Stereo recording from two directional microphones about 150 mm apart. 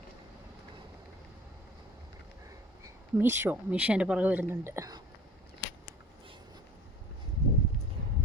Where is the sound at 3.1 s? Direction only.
15° right (ahead or behind).